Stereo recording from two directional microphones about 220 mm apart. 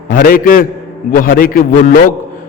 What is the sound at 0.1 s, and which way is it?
A man's voice, 40° left (ahead or behind).